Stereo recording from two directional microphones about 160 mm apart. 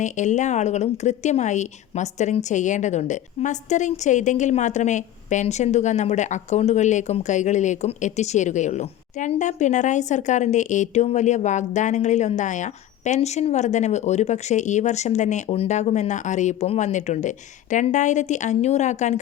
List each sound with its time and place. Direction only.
0.0 s speech: 50° left (ahead or behind)